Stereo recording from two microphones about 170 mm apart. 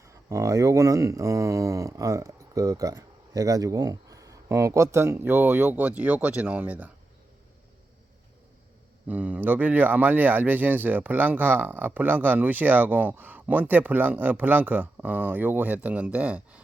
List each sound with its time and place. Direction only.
0.0 s speech: 20° right (ahead or behind)
9.0 s speech: 10° right (ahead or behind)